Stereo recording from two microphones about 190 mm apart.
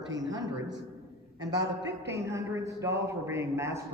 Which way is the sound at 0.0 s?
70° right (ahead or behind).